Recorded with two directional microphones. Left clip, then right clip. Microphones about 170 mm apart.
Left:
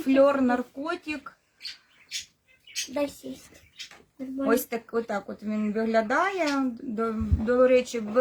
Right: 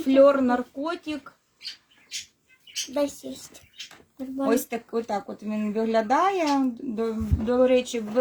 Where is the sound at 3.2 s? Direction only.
Centre (ahead or behind).